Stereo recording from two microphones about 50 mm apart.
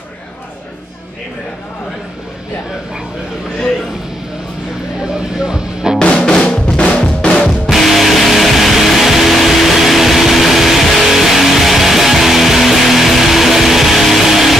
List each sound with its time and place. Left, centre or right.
5.0 s music: centre
6.3 s drum: centre
7.2 s music: centre
7.7 s music: centre